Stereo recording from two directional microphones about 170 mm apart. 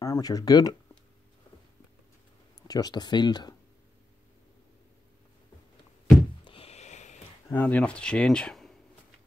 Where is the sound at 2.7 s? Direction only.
25° left (ahead or behind).